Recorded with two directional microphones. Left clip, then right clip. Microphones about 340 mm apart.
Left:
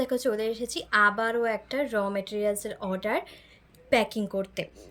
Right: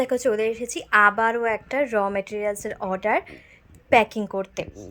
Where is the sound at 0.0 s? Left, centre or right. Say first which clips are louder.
Right 5 dB; centre.